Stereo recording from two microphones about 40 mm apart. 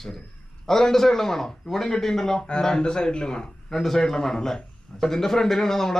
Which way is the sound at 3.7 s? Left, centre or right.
Centre.